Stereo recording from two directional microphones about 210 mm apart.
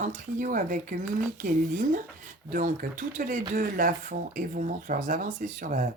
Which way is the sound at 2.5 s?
40° right (ahead or behind).